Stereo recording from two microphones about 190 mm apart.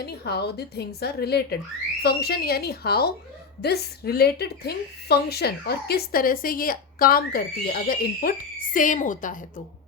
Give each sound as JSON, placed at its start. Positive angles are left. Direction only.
{"t": 0.0, "sound": "a woman's voice", "side_deg": 60}